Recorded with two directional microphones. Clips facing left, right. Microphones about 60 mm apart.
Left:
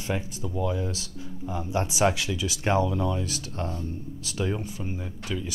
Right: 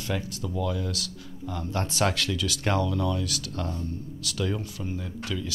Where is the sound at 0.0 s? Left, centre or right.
Left.